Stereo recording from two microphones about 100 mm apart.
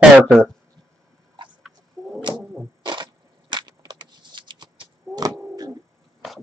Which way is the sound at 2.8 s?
50° right (ahead or behind).